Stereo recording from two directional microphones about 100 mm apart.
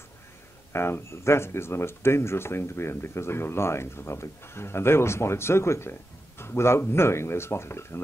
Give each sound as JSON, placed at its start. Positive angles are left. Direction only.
{"t": 0.7, "sound": "speech", "side_deg": 25}